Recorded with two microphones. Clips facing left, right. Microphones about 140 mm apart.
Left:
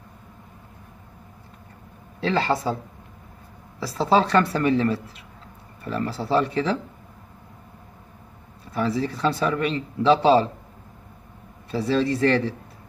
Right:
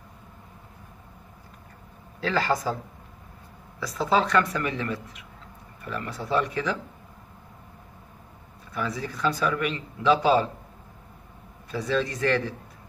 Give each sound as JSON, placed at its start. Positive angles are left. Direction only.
{"t": 2.1, "sound": "speech", "side_deg": 25}
{"t": 3.8, "sound": "speech", "side_deg": 30}
{"t": 8.7, "sound": "speech", "side_deg": 30}
{"t": 11.7, "sound": "speech", "side_deg": 30}